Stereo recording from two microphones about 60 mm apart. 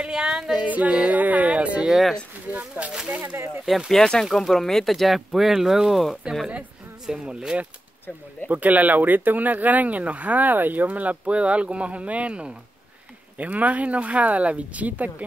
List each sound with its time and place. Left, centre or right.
0.0 s female singing: centre
0.7 s music: right
1.9 s speech: centre
3.1 s speech: right
3.6 s speech: centre
7.1 s speech: centre
8.5 s speech: right